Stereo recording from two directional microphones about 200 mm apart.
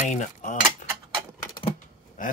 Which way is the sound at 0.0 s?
35° left (ahead or behind).